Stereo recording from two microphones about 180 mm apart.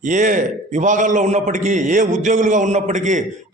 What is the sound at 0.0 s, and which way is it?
A man's voice, 45° right (ahead or behind).